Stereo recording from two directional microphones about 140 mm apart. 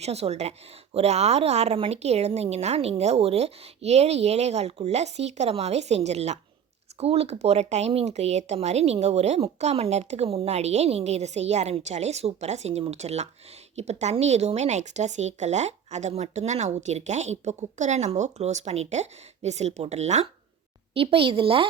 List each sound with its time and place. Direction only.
0.0 s speech: 50° right (ahead or behind)
20.9 s a woman's voice: 40° right (ahead or behind)